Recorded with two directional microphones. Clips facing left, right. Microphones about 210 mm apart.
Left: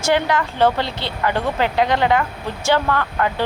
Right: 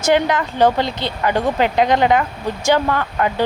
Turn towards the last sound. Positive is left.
turn(degrees=-15)  # may be behind; listen again after turning